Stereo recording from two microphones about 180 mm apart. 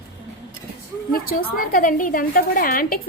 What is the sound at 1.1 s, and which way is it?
A woman's voice, 55° left (ahead or behind).